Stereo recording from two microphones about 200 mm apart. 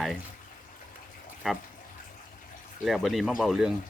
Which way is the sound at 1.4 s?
5° right (ahead or behind).